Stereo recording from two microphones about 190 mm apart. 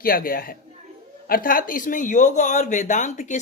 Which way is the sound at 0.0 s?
50° left (ahead or behind).